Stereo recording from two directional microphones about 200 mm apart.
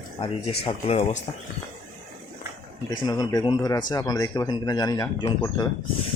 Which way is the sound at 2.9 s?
20° left (ahead or behind).